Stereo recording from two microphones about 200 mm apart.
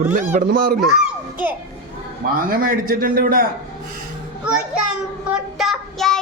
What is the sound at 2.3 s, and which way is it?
A man's voice, 45° right (ahead or behind).